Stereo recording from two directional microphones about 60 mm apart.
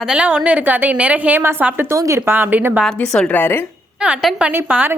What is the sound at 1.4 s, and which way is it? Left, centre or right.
Speech, right.